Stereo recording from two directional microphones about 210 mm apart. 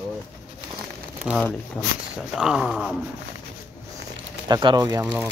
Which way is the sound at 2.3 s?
Centre (ahead or behind).